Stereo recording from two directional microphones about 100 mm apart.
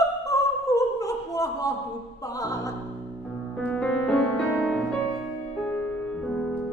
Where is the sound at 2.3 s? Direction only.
35° left (ahead or behind).